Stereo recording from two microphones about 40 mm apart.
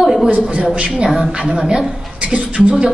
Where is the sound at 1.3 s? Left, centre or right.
Centre.